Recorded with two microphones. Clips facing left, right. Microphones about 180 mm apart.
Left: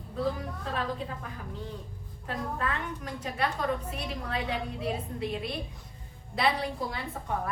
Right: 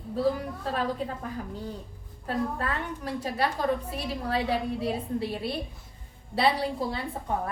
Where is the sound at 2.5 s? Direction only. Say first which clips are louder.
Right 1 dB; 35° right (ahead or behind).